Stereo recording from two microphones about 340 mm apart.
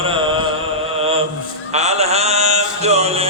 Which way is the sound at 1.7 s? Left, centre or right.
Centre.